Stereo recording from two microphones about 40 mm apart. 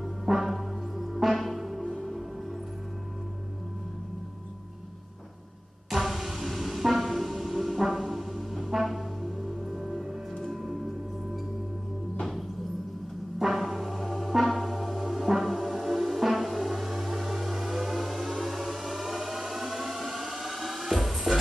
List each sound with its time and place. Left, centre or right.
0.0 s music: centre
5.9 s music: centre
10.5 s singing bowl: centre
12.2 s music: centre
13.4 s gong: centre